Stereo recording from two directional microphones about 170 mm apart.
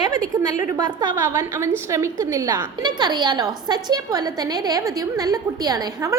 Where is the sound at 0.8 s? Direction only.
20° right (ahead or behind).